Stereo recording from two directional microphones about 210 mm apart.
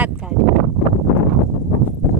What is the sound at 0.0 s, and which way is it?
Speech, 5° right (ahead or behind).